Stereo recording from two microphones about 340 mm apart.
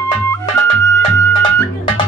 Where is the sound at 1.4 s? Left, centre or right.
Centre.